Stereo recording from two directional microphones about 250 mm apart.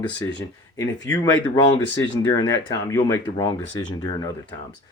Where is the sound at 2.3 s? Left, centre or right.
Centre.